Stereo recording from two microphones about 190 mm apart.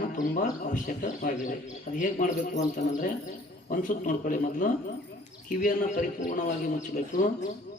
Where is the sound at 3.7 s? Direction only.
45° left (ahead or behind).